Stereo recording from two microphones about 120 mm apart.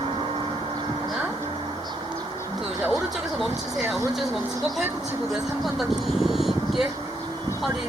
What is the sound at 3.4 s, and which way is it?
Vehicle, centre (ahead or behind).